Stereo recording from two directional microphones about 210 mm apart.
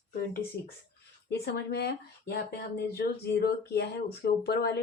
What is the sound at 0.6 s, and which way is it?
Speech, 50° left (ahead or behind).